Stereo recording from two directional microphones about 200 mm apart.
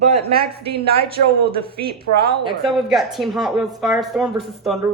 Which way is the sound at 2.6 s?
Centre (ahead or behind).